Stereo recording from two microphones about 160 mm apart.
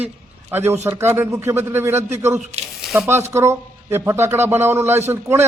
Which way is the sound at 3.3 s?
15° right (ahead or behind).